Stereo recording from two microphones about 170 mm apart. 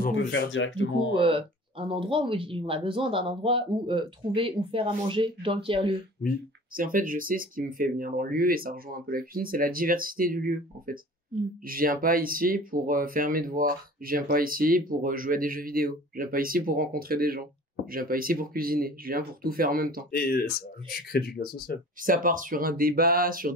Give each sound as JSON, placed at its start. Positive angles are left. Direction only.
{"t": 0.1, "sound": "speech", "side_deg": 90}
{"t": 1.1, "sound": "speech", "side_deg": -30}
{"t": 6.7, "sound": "speech", "side_deg": -55}
{"t": 20.1, "sound": "speech", "side_deg": 65}
{"t": 22.0, "sound": "speech", "side_deg": -55}